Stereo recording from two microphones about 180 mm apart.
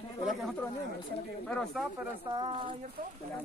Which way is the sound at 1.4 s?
5° left (ahead or behind).